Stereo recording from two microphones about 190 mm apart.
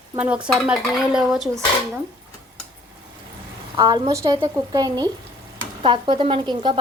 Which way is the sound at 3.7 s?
20° right (ahead or behind).